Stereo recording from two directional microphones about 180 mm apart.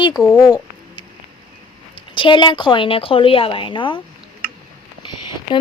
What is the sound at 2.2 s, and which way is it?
A woman's voice, 25° left (ahead or behind).